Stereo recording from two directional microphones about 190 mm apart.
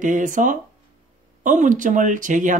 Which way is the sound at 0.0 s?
40° right (ahead or behind).